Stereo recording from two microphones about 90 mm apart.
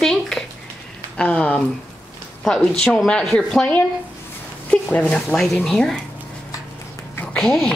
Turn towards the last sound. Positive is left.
turn(degrees=5)  # may be behind; listen again after turning